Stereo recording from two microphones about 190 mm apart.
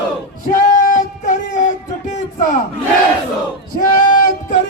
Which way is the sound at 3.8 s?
45° left (ahead or behind).